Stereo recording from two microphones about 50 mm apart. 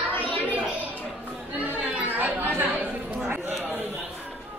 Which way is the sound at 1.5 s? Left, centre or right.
Right.